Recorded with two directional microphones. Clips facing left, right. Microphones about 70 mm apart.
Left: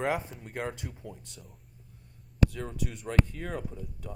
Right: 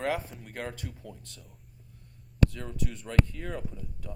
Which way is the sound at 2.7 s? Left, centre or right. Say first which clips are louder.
Even; centre.